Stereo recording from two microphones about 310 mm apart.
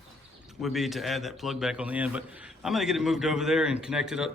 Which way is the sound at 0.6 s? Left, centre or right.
Centre.